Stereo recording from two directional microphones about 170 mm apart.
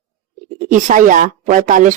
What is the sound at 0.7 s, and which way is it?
Speech, 50° right (ahead or behind).